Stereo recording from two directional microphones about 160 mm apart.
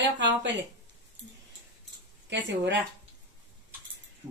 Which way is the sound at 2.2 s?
90° right.